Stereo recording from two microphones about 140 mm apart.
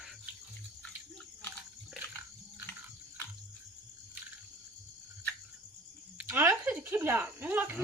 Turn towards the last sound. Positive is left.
turn(degrees=-15)  # may be behind; listen again after turning